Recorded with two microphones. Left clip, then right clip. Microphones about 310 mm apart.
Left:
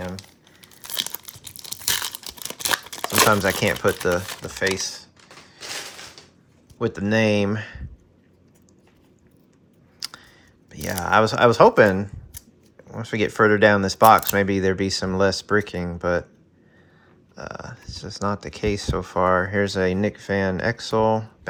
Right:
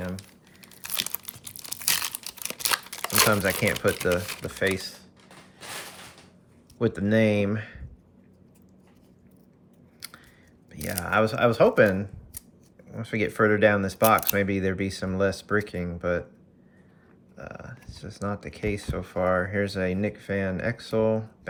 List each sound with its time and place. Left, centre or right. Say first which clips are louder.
0.9 s tearing: left 4 dB; centre
3.1 s speech: left 5 dB; centre
6.7 s speech: left 2 dB; centre
10.0 s a sound: left 9 dB; centre
10.7 s speech: left 7 dB; centre
17.3 s speech: left 6 dB; centre